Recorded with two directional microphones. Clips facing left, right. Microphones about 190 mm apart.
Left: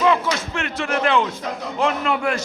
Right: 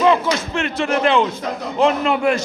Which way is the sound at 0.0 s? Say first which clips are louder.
Right 3 dB; 30° right (ahead or behind).